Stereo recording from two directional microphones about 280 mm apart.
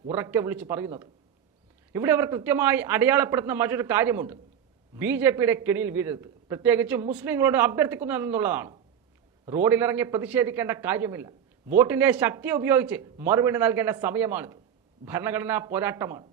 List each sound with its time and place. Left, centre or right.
0.1 s a man's voice: centre